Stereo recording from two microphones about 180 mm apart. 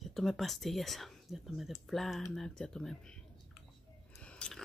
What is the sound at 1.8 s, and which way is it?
Speech, centre (ahead or behind).